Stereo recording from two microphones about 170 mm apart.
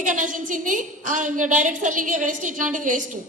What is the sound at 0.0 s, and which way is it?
A woman's voice, 50° right (ahead or behind).